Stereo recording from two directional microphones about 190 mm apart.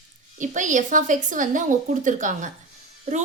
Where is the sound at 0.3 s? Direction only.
40° right (ahead or behind).